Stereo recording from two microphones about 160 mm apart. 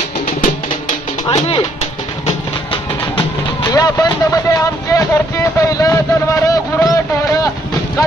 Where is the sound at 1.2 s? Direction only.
40° left (ahead or behind).